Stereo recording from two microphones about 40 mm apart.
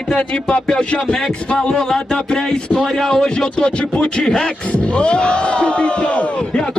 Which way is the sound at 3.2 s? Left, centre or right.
Left.